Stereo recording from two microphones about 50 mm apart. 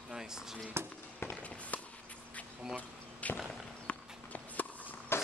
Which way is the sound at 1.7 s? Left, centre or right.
Left.